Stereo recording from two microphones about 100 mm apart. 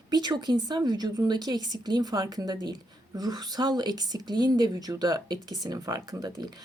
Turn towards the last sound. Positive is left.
turn(degrees=-40)  # may be behind; listen again after turning